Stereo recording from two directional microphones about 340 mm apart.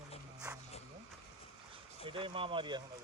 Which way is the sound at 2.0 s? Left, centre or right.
Centre.